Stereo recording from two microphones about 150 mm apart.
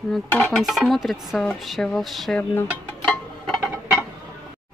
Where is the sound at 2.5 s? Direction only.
15° left (ahead or behind).